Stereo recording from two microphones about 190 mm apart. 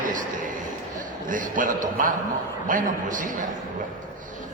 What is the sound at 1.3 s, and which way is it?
A man's voice, 45° right (ahead or behind).